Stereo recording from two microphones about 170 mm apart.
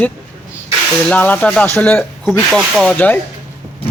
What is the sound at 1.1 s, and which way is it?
Speech, 10° left (ahead or behind).